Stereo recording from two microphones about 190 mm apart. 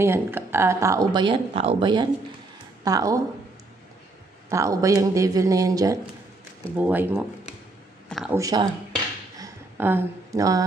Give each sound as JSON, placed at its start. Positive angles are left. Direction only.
{"t": 0.0, "sound": "speech", "side_deg": -10}
{"t": 4.5, "sound": "speech", "side_deg": -15}
{"t": 8.3, "sound": "speech", "side_deg": -20}
{"t": 9.4, "sound": "a sound", "side_deg": -10}